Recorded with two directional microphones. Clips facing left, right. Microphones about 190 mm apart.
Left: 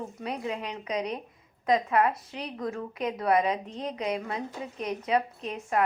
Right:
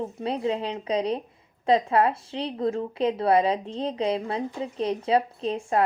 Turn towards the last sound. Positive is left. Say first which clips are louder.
# right 4 dB
turn(degrees=-30)  # may be behind; listen again after turning